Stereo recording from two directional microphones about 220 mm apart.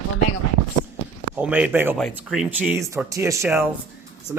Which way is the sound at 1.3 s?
5° right (ahead or behind).